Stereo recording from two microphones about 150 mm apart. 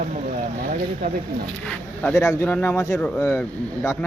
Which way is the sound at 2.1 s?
20° left (ahead or behind).